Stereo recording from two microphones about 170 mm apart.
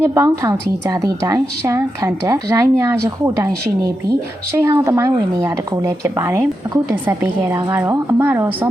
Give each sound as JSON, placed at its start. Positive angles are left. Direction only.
{"t": 0.0, "sound": "a woman's voice", "side_deg": -15}